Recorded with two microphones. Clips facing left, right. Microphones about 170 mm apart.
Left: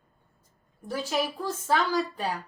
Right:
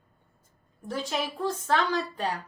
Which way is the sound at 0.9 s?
5° left (ahead or behind).